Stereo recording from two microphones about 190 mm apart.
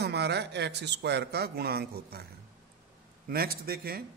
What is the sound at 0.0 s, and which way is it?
A man's voice, 60° right (ahead or behind).